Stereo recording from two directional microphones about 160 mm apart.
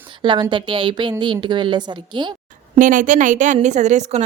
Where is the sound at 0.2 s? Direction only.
30° right (ahead or behind).